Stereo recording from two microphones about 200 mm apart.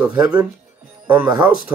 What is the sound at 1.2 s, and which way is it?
Speech, 20° right (ahead or behind).